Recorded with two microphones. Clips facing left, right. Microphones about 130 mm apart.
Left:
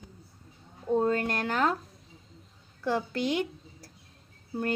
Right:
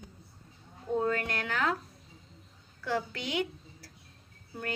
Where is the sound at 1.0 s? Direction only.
40° left (ahead or behind).